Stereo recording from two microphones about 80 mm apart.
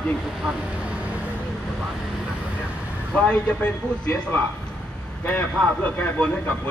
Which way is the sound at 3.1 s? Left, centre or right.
Centre.